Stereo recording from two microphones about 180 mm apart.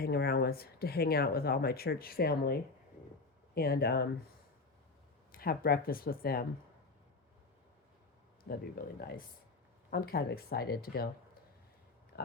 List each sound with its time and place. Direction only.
0.0 s speech: 60° left (ahead or behind)
5.3 s speech: 55° left (ahead or behind)
9.0 s speech: 60° left (ahead or behind)
12.1 s oink: 60° left (ahead or behind)